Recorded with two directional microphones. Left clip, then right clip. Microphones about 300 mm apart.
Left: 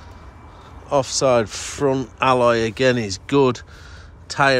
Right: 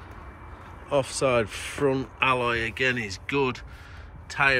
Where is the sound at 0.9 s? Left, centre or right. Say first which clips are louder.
Left 6 dB; centre.